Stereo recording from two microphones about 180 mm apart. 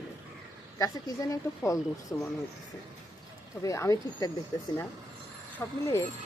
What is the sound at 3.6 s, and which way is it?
Speech, 15° left (ahead or behind).